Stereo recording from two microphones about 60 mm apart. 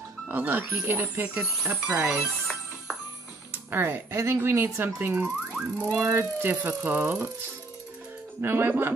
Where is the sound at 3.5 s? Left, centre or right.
Right.